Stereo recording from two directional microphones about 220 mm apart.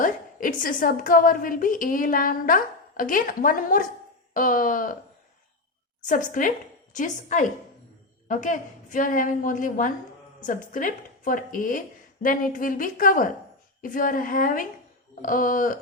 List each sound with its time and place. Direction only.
0.0 s a woman's voice: 40° left (ahead or behind)
6.1 s a woman's voice: 35° left (ahead or behind)